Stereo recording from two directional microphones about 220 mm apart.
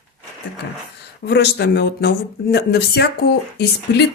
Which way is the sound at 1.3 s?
50° left (ahead or behind).